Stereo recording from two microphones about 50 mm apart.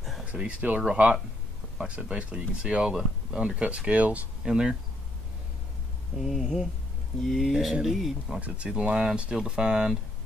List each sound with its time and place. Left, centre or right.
0.2 s speech: right
4.5 s speech: centre
6.1 s speech: centre
8.4 s speech: right